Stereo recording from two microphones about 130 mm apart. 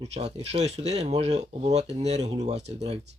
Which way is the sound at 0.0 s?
55° right (ahead or behind).